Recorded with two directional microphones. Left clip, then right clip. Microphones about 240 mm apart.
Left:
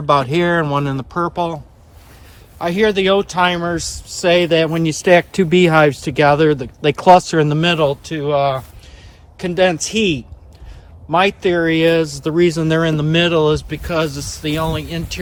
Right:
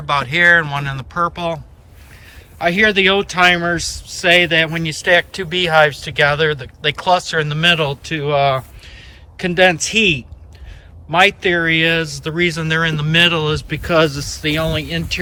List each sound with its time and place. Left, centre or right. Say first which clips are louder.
0.0 s speech: right 1 dB; centre